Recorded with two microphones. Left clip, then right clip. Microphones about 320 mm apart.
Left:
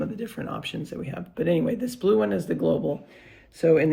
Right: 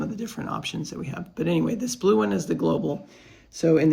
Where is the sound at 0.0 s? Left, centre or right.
Centre.